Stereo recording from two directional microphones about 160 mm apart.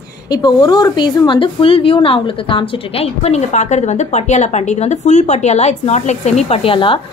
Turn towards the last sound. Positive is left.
turn(degrees=35)  # may be behind; listen again after turning